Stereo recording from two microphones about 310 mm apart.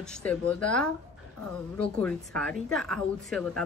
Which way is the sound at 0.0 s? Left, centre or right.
Centre.